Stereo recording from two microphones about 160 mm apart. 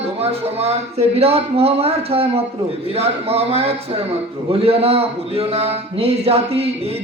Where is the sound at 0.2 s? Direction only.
40° right (ahead or behind).